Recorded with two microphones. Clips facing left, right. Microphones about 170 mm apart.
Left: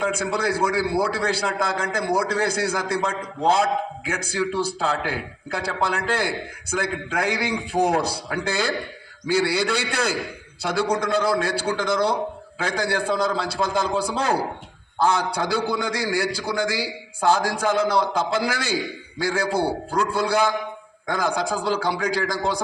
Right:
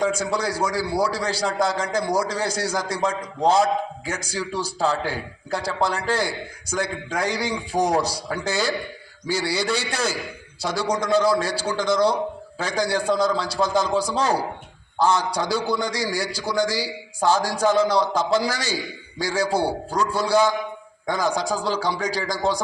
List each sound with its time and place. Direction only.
0.1 s a man's voice: 60° left (ahead or behind)